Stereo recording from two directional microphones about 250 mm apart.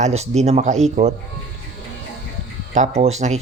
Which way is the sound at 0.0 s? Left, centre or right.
Right.